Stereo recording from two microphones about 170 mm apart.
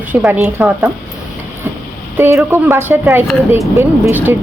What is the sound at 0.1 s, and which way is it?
Speech, 10° right (ahead or behind).